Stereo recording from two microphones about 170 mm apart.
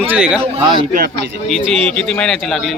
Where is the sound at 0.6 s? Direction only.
25° right (ahead or behind).